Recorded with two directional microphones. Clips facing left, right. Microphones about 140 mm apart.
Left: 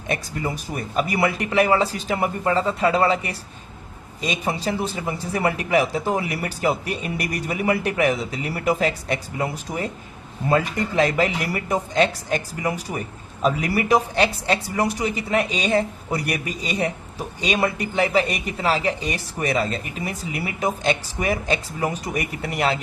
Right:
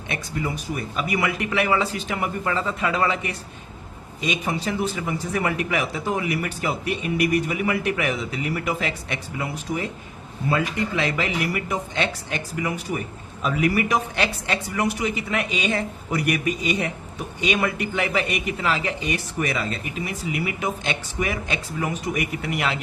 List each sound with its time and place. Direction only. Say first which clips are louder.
0.1 s a woman's voice: left 2 dB; 40° left (ahead or behind)